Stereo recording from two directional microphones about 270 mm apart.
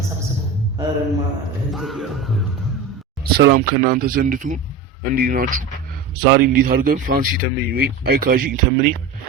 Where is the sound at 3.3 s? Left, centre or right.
Right.